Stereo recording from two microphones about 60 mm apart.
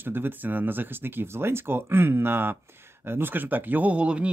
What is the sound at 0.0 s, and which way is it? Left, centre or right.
Speech, right.